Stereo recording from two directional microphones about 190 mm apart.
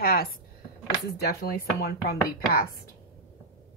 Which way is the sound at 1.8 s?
55° left (ahead or behind).